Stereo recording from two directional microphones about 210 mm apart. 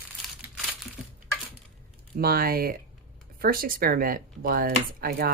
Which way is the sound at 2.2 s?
45° right (ahead or behind).